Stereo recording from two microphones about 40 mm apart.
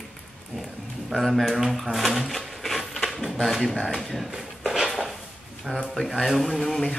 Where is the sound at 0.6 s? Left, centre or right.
Centre.